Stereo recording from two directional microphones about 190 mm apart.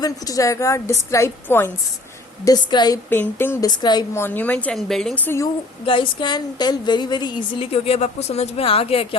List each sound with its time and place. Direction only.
0.0 s a woman's voice: 20° left (ahead or behind)
5.8 s a woman's voice: 25° left (ahead or behind)